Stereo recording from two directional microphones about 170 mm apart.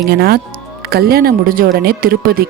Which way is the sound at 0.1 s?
65° right (ahead or behind).